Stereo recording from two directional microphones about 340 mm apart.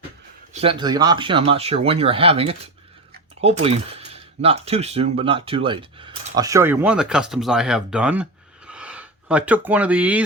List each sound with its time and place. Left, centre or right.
0.5 s speech: centre